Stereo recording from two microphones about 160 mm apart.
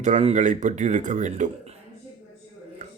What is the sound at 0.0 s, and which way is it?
Speech, 45° right (ahead or behind).